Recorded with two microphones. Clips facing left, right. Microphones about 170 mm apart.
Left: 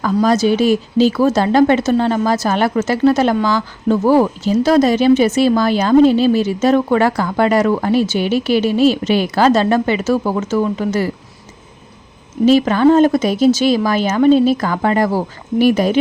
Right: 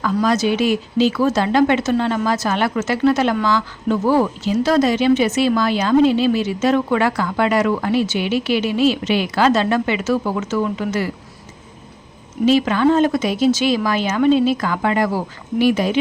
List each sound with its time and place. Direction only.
0.0 s speech: 35° left (ahead or behind)
12.5 s speech: 40° left (ahead or behind)